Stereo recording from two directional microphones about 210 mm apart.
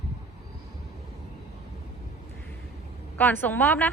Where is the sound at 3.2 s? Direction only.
10° left (ahead or behind).